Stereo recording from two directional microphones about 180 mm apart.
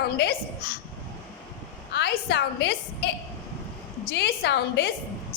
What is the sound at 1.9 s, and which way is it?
A woman's voice, 70° left (ahead or behind).